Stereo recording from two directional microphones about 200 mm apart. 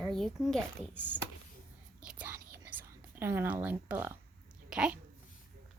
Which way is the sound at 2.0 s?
5° right (ahead or behind).